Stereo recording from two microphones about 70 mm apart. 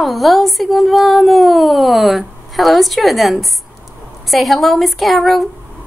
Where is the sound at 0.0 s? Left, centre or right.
Centre.